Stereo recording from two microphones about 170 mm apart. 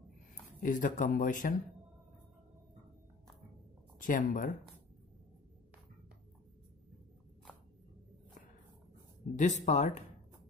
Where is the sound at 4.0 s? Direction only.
50° left (ahead or behind).